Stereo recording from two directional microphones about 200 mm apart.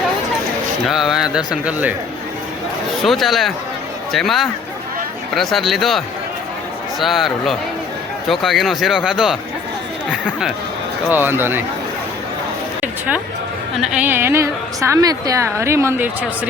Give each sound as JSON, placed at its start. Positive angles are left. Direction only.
{"t": 0.9, "sound": "speech", "side_deg": 0}
{"t": 3.0, "sound": "speech", "side_deg": 0}
{"t": 7.0, "sound": "speech", "side_deg": 0}
{"t": 11.1, "sound": "a woman's voice", "side_deg": -10}
{"t": 12.8, "sound": "a woman's voice", "side_deg": -10}